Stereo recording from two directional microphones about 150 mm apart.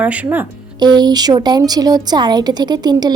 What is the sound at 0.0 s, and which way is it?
Speech, 10° right (ahead or behind).